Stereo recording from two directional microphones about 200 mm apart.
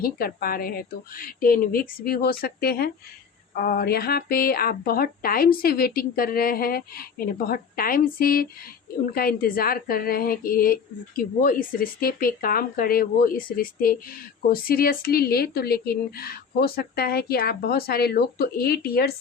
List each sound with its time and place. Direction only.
0.0 s a woman's voice: 45° left (ahead or behind)